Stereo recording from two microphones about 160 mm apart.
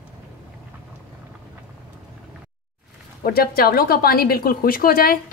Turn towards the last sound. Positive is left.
turn(degrees=65)  # may be behind; listen again after turning